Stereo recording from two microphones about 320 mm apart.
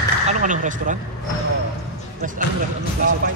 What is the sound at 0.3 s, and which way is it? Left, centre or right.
Speech, right.